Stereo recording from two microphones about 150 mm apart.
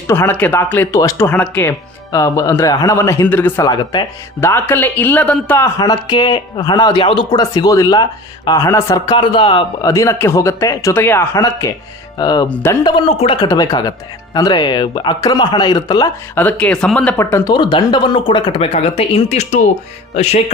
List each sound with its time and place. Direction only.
0.1 s speech: 15° left (ahead or behind)
2.1 s speech: 20° left (ahead or behind)
3.7 s speech: 30° left (ahead or behind)
4.4 s speech: 15° left (ahead or behind); by 9.9 s 35° left (ahead or behind)
9.9 s speech: 20° left (ahead or behind)
12.5 s speech: 10° left (ahead or behind)
12.8 s speech: 30° left (ahead or behind)
13.4 s speech: 25° left (ahead or behind)
16.3 s speech: 10° left (ahead or behind)
17.2 s speech: 15° left (ahead or behind)
17.5 s speech: 30° left (ahead or behind); by 19.6 s 50° left (ahead or behind)
20.1 s music: 45° left (ahead or behind)